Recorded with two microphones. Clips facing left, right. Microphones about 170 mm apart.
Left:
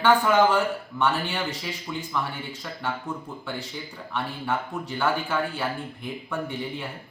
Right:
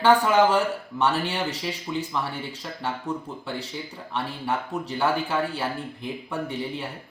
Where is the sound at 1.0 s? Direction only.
35° right (ahead or behind).